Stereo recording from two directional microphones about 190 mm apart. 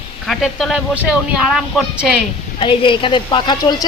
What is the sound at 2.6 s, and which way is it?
A woman's voice, 25° left (ahead or behind).